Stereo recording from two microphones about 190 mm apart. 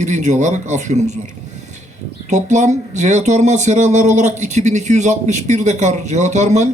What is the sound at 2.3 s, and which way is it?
Speech, 40° right (ahead or behind).